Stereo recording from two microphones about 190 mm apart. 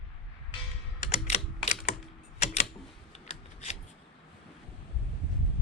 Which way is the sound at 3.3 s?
35° left (ahead or behind).